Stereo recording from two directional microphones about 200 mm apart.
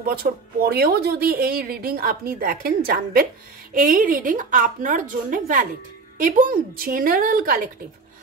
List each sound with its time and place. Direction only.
0.0 s a woman's voice: 50° right (ahead or behind)